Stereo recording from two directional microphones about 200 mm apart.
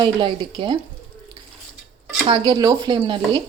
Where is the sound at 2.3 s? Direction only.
20° right (ahead or behind).